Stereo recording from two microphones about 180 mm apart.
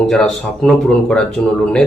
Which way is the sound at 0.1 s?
Centre (ahead or behind).